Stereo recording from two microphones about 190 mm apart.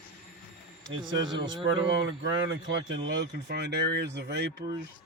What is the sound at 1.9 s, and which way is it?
Speech, 70° right (ahead or behind).